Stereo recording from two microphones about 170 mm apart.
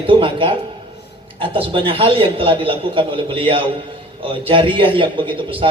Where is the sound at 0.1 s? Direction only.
30° right (ahead or behind).